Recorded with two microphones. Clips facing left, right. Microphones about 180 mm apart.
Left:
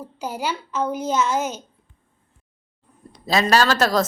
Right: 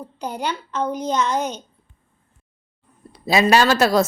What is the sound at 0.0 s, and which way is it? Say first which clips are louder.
A woman's voice: right 1 dB; 5° left (ahead or behind).